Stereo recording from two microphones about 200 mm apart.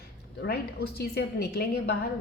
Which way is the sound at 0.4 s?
55° left (ahead or behind).